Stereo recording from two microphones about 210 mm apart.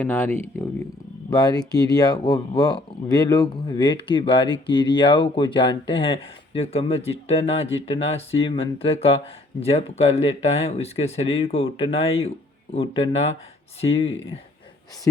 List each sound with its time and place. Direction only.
0.0 s speech: 10° left (ahead or behind); by 14.1 s 30° left (ahead or behind)